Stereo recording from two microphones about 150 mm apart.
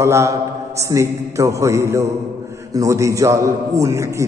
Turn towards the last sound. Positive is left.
turn(degrees=-20)  # may be behind; listen again after turning